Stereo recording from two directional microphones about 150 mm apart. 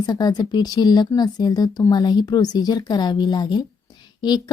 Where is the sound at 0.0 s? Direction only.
30° left (ahead or behind).